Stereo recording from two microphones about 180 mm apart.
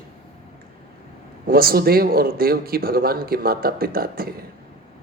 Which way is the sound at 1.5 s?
55° right (ahead or behind).